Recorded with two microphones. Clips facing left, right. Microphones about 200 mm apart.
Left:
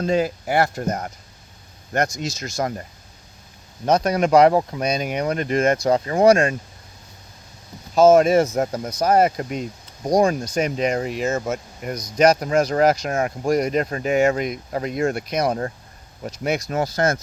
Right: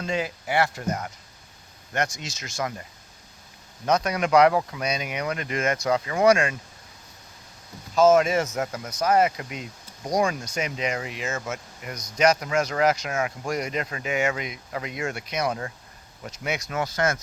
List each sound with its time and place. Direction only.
0.0 s speech: 40° left (ahead or behind)
3.8 s speech: 35° left (ahead or behind)
7.9 s speech: 35° left (ahead or behind)